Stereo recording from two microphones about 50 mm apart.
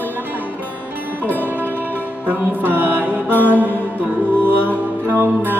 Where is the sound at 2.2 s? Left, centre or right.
Right.